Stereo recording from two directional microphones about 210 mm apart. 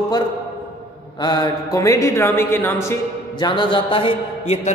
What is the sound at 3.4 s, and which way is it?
A man's voice, 25° left (ahead or behind).